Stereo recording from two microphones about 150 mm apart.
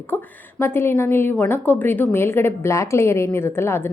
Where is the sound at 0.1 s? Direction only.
10° left (ahead or behind).